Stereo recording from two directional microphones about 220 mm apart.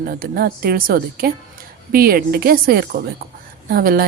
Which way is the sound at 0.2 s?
40° right (ahead or behind).